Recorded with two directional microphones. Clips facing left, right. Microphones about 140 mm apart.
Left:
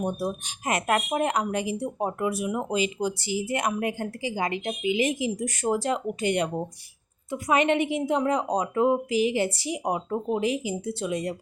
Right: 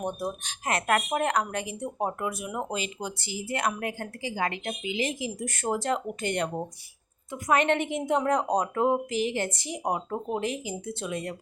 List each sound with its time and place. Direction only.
0.2 s a woman's voice: 10° left (ahead or behind)